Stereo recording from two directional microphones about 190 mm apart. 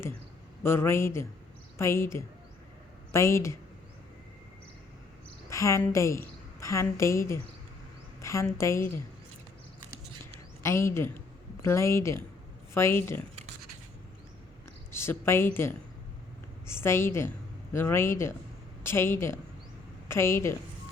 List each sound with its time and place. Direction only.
0.6 s a woman's voice: 15° left (ahead or behind)
5.5 s a woman's voice: 15° left (ahead or behind)
10.6 s a woman's voice: 15° left (ahead or behind)
14.9 s a woman's voice: 10° left (ahead or behind)